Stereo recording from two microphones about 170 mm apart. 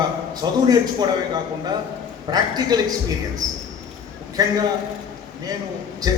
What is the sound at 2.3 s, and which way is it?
Speech, 25° right (ahead or behind).